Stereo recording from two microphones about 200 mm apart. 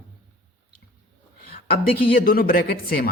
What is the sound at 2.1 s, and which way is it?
Speech, 45° left (ahead or behind).